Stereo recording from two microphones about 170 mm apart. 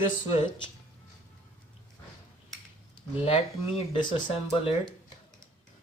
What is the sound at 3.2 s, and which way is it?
Speech, 35° left (ahead or behind).